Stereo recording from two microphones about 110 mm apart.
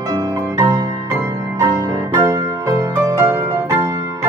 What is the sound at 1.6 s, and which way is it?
Music, 35° right (ahead or behind).